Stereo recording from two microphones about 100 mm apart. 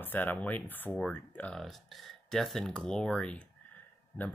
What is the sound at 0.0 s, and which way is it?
Speech, 20° left (ahead or behind).